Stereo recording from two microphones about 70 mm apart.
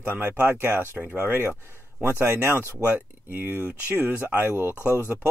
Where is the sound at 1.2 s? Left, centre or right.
Right.